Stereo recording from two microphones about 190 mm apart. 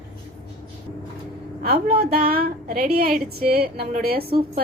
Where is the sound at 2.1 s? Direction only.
50° right (ahead or behind).